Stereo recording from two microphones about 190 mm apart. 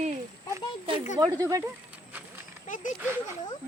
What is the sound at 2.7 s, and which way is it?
Speech, 45° left (ahead or behind).